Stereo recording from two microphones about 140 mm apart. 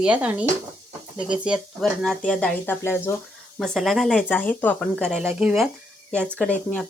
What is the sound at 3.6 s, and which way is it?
Speech, centre (ahead or behind).